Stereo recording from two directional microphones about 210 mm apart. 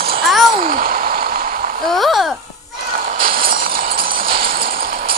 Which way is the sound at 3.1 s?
45° right (ahead or behind).